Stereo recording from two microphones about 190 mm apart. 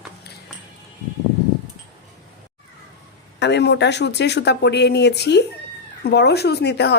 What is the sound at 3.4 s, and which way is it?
Speech, 65° left (ahead or behind).